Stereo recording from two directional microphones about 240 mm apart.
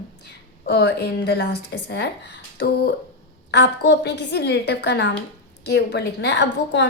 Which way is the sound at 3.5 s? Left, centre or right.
Left.